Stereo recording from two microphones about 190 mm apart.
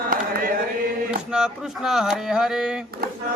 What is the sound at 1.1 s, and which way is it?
Mantra, 5° right (ahead or behind).